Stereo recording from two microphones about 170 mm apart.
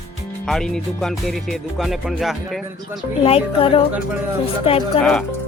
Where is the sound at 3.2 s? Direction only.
35° left (ahead or behind).